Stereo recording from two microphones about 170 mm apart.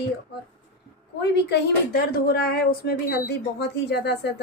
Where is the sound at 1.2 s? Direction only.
85° left.